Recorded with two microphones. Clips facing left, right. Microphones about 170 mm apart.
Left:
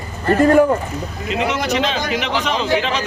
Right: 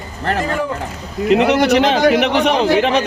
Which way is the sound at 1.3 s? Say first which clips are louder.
Right 8 dB; 65° right (ahead or behind).